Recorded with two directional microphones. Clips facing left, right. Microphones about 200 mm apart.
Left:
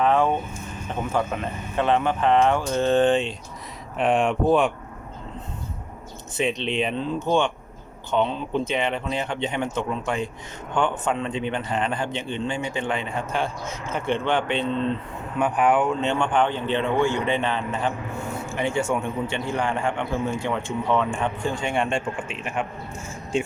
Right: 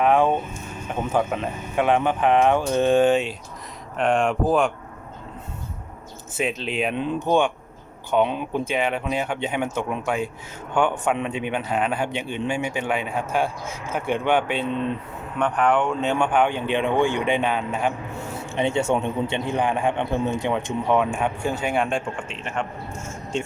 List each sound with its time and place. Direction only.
0.0 s speech: 15° right (ahead or behind)
6.3 s speech: 5° right (ahead or behind)
15.4 s speech: 10° left (ahead or behind); by 17.9 s 10° right (ahead or behind)
18.5 s speech: 25° right (ahead or behind); by 22.4 s centre (ahead or behind)
22.4 s speech: 10° left (ahead or behind)